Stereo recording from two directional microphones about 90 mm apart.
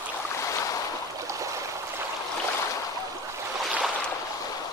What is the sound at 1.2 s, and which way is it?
Stream, 35° right (ahead or behind).